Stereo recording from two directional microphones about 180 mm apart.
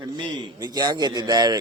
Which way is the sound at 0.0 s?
25° right (ahead or behind).